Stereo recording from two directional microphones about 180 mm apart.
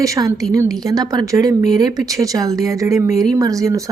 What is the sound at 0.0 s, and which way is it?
A woman's voice, 20° right (ahead or behind).